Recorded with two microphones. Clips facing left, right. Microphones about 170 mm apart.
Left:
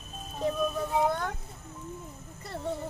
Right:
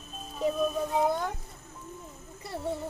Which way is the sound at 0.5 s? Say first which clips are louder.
Right 1 dB; 10° right (ahead or behind).